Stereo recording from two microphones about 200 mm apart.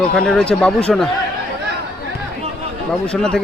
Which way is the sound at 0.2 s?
5° left (ahead or behind).